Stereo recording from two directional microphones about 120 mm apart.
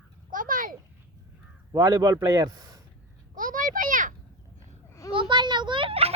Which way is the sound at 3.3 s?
90° right.